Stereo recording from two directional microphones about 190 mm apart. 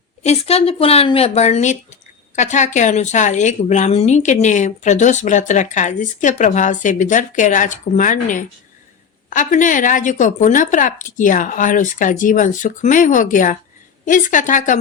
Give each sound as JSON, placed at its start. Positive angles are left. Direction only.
{"t": 0.2, "sound": "a woman's voice", "side_deg": 35}